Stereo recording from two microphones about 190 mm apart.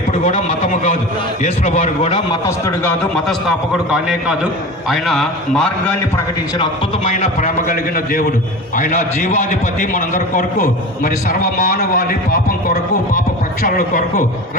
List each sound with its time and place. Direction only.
0.1 s a man's voice: 35° left (ahead or behind); by 2.9 s 15° left (ahead or behind)
3.9 s a man's voice: 5° right (ahead or behind)
7.1 s a man's voice: 40° left (ahead or behind)
13.6 s a man's voice: 50° left (ahead or behind)